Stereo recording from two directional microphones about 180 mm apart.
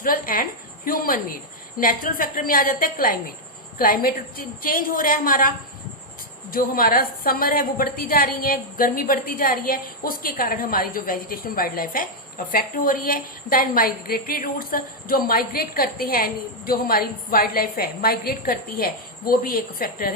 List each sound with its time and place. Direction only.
0.0 s a woman's voice: 50° left (ahead or behind)